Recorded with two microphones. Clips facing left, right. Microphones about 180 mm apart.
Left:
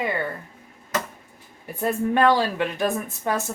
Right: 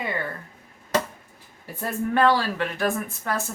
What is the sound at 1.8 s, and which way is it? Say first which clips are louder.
Speech: left 2 dB; 20° left (ahead or behind).